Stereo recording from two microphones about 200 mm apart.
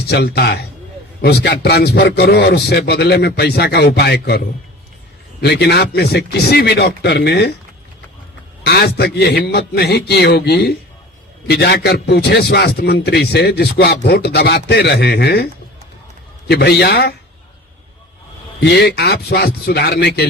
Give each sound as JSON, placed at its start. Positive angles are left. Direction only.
{"t": 0.1, "sound": "a man's voice", "side_deg": 55}
{"t": 8.6, "sound": "a man's voice", "side_deg": 55}
{"t": 16.5, "sound": "a man's voice", "side_deg": 55}
{"t": 18.6, "sound": "a man's voice", "side_deg": 55}